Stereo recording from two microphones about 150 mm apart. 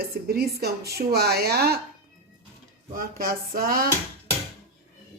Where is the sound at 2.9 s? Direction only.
75° right (ahead or behind).